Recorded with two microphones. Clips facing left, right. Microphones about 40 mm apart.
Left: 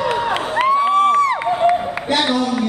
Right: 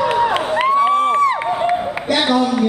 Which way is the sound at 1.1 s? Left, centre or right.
Right.